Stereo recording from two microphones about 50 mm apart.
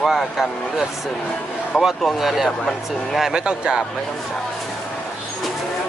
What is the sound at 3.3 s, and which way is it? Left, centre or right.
Speech, centre.